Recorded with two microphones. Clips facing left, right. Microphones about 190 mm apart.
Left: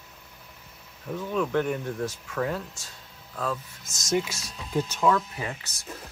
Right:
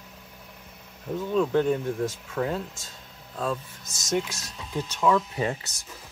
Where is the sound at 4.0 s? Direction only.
Centre (ahead or behind).